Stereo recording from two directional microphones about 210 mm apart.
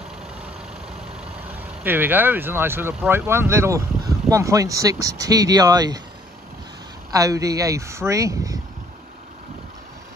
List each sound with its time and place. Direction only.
1.8 s speech: 10° right (ahead or behind)
7.2 s speech: 15° right (ahead or behind)